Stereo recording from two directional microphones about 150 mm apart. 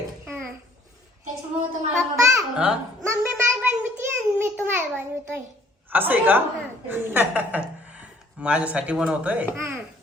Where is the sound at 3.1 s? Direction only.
15° right (ahead or behind).